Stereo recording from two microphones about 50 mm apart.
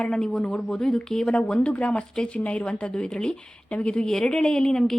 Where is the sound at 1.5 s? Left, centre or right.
Left.